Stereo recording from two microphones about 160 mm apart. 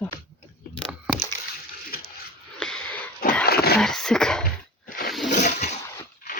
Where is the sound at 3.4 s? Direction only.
75° left (ahead or behind).